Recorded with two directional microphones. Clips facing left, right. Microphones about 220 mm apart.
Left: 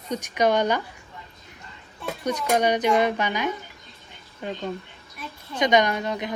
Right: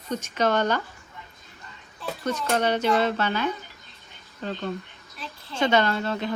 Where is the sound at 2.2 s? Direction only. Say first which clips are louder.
Left 2 dB; 15° left (ahead or behind).